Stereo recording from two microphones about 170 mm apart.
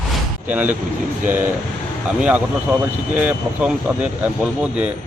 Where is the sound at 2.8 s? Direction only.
10° right (ahead or behind).